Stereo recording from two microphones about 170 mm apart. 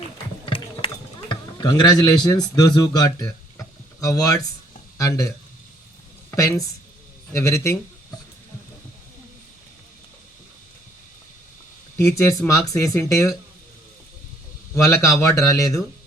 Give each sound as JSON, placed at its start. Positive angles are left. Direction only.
{"t": 0.4, "sound": "mechanisms", "side_deg": 30}
{"t": 1.3, "sound": "a man's voice", "side_deg": 25}
{"t": 6.3, "sound": "a man's voice", "side_deg": 20}
{"t": 11.9, "sound": "speech", "side_deg": 15}
{"t": 14.8, "sound": "speech", "side_deg": 15}